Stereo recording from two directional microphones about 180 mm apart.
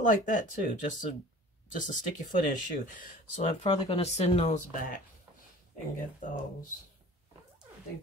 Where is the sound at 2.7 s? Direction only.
45° left (ahead or behind).